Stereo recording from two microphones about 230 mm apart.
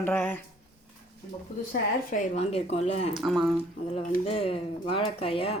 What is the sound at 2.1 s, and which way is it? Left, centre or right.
Speech, left.